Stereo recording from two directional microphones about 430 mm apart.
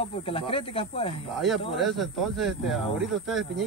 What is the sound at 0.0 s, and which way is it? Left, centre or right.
A man's voice, centre.